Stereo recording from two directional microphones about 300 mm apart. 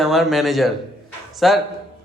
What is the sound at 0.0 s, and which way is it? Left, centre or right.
Speech, centre.